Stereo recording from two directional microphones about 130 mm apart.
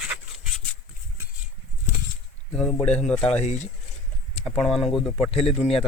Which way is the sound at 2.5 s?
10° left (ahead or behind).